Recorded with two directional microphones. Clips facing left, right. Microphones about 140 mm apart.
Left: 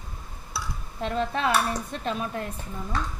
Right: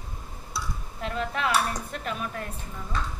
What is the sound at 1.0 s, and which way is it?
Speech, 30° left (ahead or behind).